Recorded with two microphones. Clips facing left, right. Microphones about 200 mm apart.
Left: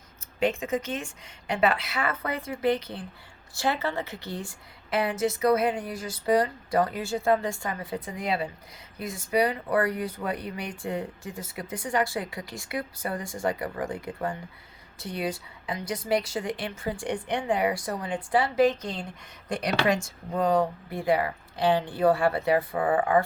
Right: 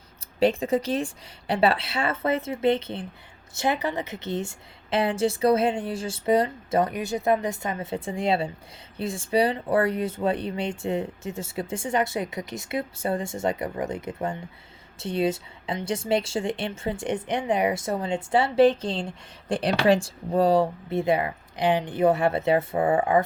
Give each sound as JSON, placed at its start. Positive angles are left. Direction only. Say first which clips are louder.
{"t": 0.3, "sound": "a woman's voice", "louder": "right 5 dB", "side_deg": -35}